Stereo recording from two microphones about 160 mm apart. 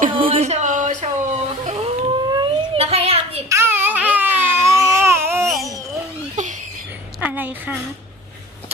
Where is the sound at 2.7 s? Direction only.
40° right (ahead or behind).